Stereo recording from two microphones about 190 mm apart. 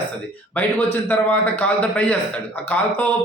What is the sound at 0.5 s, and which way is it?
Speech, 10° left (ahead or behind).